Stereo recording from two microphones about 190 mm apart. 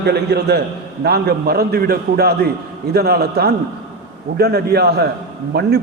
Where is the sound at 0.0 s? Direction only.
60° right (ahead or behind).